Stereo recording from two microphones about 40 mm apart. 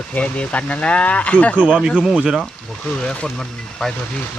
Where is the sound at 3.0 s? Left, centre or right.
Left.